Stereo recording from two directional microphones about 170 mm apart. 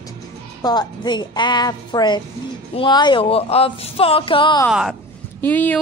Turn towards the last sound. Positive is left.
turn(degrees=10)  # may be behind; listen again after turning